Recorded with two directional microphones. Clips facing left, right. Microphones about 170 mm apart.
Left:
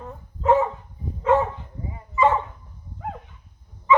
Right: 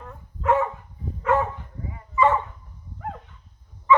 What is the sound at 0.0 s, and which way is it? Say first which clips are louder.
Dog: left 3 dB; 25° left (ahead or behind).